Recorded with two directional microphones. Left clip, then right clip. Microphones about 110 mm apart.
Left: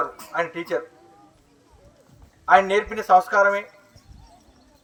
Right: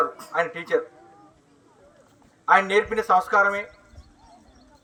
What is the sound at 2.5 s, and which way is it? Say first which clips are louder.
A man's voice: left 2 dB; 25° left (ahead or behind).